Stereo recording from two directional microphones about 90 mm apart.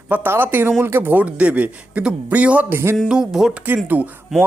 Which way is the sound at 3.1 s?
5° right (ahead or behind).